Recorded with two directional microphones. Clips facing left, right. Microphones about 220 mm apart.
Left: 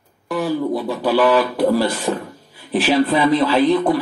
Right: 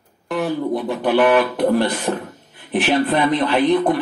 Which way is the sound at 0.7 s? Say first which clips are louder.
Even; 20° right (ahead or behind).